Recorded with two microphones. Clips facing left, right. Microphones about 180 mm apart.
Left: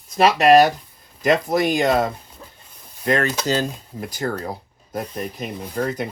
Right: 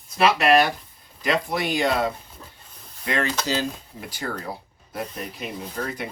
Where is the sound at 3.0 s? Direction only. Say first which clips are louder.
Left 5 dB; 45° left (ahead or behind).